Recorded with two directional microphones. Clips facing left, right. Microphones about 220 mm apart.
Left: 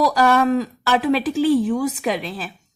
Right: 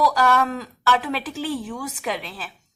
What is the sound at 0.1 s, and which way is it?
Speech, 15° left (ahead or behind).